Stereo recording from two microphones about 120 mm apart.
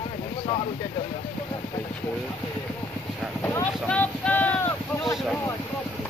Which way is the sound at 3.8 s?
10° left (ahead or behind).